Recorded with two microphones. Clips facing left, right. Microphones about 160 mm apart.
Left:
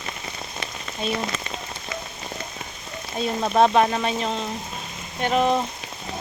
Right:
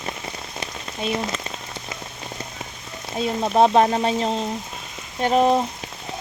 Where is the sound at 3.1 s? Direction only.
20° right (ahead or behind).